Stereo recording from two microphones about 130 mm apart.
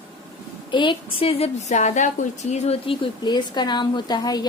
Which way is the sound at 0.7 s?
40° left (ahead or behind).